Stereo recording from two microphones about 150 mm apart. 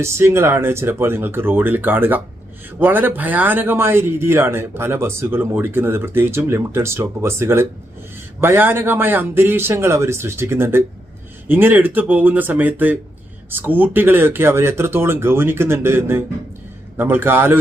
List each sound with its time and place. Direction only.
0.0 s speech: 15° right (ahead or behind)